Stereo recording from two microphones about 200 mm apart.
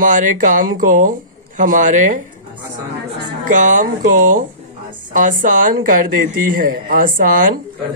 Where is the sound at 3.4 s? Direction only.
40° right (ahead or behind).